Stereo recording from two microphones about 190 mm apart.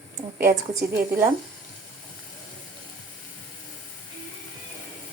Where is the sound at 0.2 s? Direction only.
15° right (ahead or behind).